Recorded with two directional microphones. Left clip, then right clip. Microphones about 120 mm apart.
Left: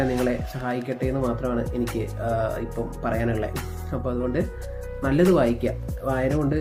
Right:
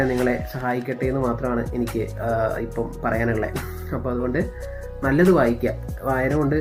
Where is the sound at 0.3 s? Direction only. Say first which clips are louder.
Right 3 dB; 30° left (ahead or behind).